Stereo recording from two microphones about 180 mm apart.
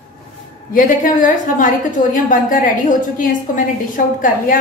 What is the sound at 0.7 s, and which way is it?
A woman's voice, 50° left (ahead or behind).